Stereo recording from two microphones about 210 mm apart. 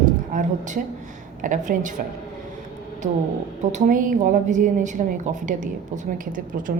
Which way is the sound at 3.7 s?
40° right (ahead or behind).